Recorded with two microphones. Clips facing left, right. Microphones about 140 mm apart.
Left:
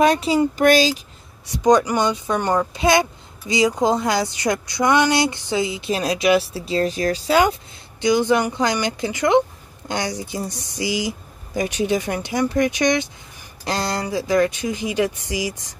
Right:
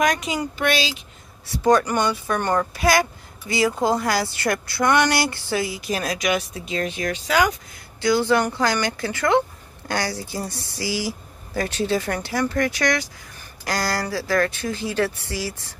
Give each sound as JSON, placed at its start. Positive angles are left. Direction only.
{"t": 0.0, "sound": "speech", "side_deg": 30}
{"t": 1.4, "sound": "speech", "side_deg": 20}
{"t": 8.0, "sound": "speech", "side_deg": 20}